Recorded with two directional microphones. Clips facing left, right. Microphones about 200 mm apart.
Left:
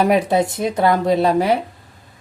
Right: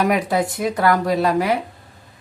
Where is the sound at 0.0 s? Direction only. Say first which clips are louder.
Left 3 dB; 25° left (ahead or behind).